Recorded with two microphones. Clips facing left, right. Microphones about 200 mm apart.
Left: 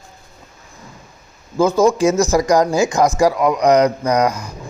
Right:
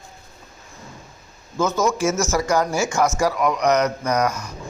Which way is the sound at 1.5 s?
30° left (ahead or behind).